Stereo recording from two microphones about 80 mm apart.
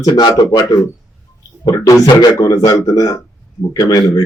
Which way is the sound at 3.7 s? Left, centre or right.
Left.